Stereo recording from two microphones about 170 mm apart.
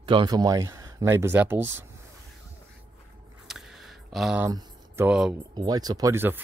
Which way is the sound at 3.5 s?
Centre (ahead or behind).